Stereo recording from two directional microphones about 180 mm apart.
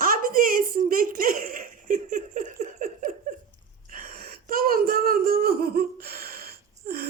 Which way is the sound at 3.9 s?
50° right (ahead or behind).